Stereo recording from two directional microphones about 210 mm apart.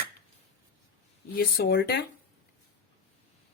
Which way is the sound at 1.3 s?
50° left (ahead or behind).